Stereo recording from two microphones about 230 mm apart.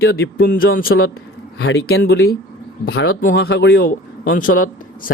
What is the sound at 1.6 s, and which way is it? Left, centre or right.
Speech, left.